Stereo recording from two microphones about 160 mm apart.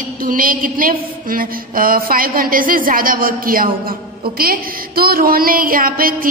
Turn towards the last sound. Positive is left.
turn(degrees=-65)  # may be behind; listen again after turning